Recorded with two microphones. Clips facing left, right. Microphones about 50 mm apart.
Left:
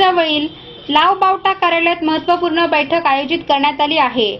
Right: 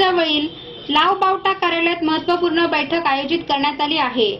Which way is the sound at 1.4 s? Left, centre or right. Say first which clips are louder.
Left 4 dB; left.